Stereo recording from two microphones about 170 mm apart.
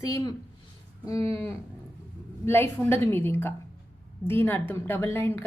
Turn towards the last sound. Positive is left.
turn(degrees=10)  # may be behind; listen again after turning